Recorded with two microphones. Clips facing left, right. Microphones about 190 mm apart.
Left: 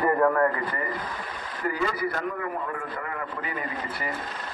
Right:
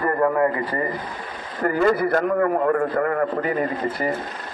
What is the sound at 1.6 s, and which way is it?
A man's voice, 55° right (ahead or behind).